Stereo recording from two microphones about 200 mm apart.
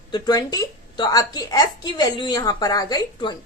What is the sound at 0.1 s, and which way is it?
A woman's voice, 20° left (ahead or behind).